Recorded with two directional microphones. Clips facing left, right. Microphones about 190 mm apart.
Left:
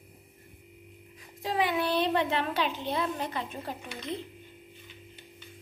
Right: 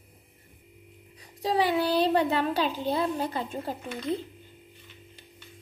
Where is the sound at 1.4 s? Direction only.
35° right (ahead or behind).